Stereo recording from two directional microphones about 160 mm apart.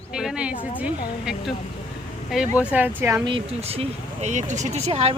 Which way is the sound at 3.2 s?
35° right (ahead or behind).